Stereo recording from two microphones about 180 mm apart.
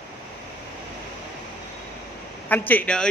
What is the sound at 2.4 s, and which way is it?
Speech, 10° left (ahead or behind).